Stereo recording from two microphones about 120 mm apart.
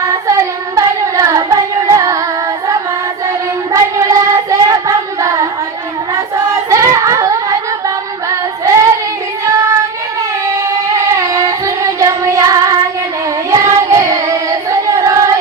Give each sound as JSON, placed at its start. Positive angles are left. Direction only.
{"t": 0.0, "sound": "child singing", "side_deg": -25}
{"t": 3.7, "sound": "child singing", "side_deg": -25}
{"t": 6.5, "sound": "child singing", "side_deg": -25}
{"t": 8.6, "sound": "singing", "side_deg": -25}
{"t": 10.8, "sound": "child singing", "side_deg": -25}